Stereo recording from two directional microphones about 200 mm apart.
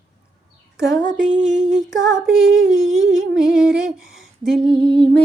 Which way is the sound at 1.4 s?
40° right (ahead or behind).